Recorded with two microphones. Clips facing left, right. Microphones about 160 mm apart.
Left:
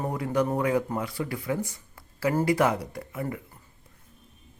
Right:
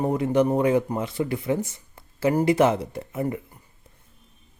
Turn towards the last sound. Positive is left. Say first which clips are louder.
# right 5 dB
turn(degrees=-25)  # may be behind; listen again after turning